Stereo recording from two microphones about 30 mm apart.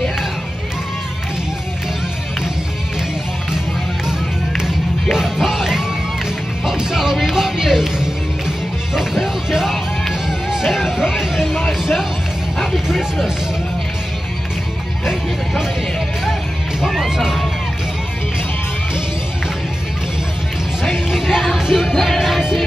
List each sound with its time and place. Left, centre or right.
5.1 s music: centre
16.8 s music: centre
21.1 s music: centre
21.9 s music: centre